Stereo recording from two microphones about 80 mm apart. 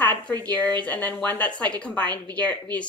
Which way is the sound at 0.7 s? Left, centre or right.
Centre.